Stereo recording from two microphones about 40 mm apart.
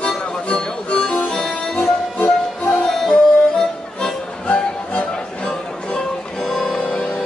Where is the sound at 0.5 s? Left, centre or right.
Left.